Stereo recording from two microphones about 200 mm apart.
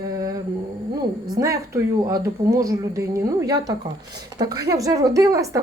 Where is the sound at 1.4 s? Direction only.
15° right (ahead or behind).